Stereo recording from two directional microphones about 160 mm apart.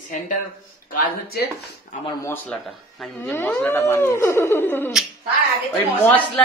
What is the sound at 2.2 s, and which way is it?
Speech, 15° left (ahead or behind).